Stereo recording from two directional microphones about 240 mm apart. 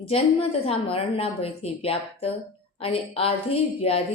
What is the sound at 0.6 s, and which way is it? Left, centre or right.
A woman's voice, left.